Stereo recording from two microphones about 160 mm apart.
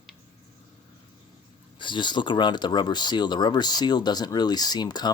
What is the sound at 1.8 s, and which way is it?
Speech, 30° left (ahead or behind).